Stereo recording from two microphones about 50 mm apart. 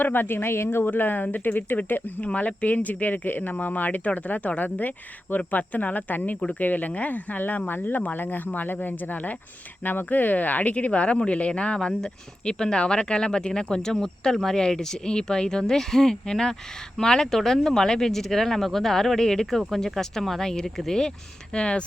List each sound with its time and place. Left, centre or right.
0.0 s speech: left
0.9 s speech: left
2.2 s speech: left; by 21.1 s centre
21.5 s speech: left